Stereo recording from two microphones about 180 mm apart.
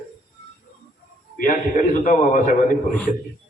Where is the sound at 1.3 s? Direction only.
50° left (ahead or behind).